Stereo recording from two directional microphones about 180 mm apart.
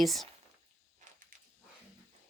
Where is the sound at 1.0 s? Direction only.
50° right (ahead or behind).